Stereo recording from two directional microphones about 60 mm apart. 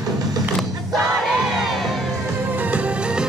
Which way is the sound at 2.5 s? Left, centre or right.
Right.